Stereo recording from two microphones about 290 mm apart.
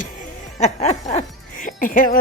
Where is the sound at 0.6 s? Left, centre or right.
Left.